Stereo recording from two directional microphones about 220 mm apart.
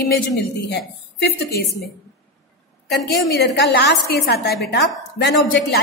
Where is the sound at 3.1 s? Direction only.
50° left (ahead or behind).